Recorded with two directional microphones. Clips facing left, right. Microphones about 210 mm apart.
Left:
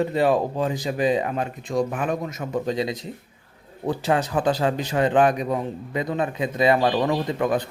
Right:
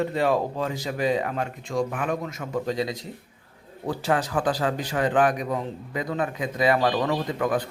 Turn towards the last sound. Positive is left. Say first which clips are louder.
# left 2 dB
turn(degrees=25)  # may be behind; listen again after turning